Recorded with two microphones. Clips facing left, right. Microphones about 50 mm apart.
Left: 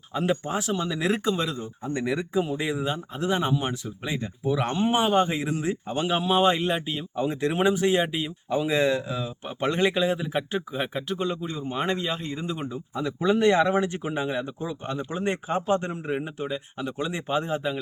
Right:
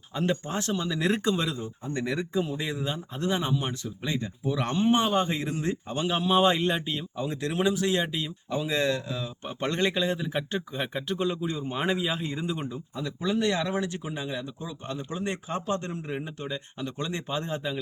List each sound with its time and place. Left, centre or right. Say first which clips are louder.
0.1 s speech: left 3 dB; centre
7.2 s speech: left 5 dB; centre
12.9 s speech: left 6 dB; left